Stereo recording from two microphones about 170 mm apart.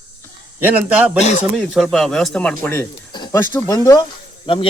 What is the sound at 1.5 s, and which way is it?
Speech, centre (ahead or behind).